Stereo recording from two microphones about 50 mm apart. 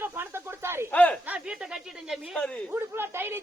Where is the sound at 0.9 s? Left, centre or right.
Left.